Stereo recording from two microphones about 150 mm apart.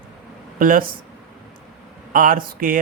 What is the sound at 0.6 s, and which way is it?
Speech, 65° right (ahead or behind).